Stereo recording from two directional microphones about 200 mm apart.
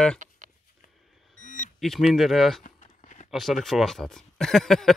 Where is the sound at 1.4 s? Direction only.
40° left (ahead or behind).